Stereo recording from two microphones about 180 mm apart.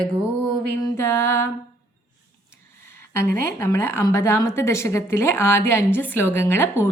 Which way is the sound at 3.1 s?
15° left (ahead or behind).